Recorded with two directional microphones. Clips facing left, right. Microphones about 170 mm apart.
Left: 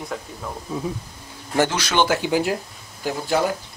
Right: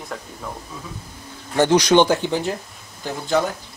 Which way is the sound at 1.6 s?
20° right (ahead or behind).